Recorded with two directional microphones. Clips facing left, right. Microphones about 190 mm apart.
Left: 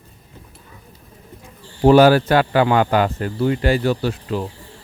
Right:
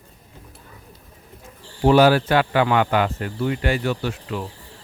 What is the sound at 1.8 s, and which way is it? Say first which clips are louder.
Speech: left 4 dB; 45° left (ahead or behind).